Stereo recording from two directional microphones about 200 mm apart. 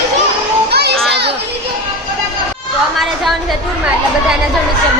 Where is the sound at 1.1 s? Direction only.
55° right (ahead or behind).